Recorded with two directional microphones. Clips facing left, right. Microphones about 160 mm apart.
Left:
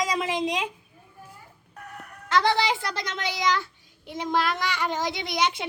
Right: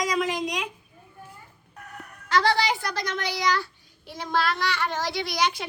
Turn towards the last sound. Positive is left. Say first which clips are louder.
# even
turn(degrees=25)  # may be behind; listen again after turning